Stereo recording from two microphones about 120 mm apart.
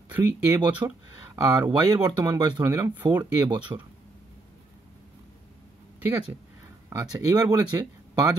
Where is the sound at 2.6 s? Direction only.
25° right (ahead or behind).